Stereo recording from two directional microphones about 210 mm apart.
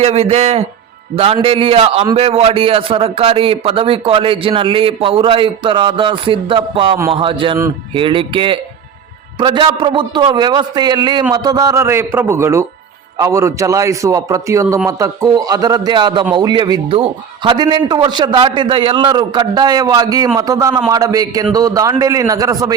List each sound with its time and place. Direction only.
0.0 s a man's voice: 30° right (ahead or behind)